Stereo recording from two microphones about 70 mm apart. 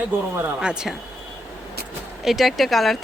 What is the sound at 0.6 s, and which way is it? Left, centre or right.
Speech, centre.